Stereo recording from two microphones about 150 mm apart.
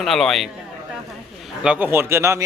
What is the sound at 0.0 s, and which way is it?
Speech, centre (ahead or behind).